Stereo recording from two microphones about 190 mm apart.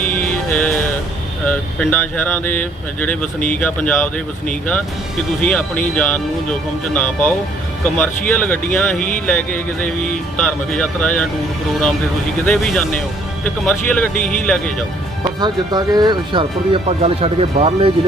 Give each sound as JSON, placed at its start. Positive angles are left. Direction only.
{"t": 0.0, "sound": "music", "side_deg": 10}
{"t": 1.8, "sound": "speech", "side_deg": 10}
{"t": 12.5, "sound": "speech", "side_deg": 5}
{"t": 15.4, "sound": "speech", "side_deg": -20}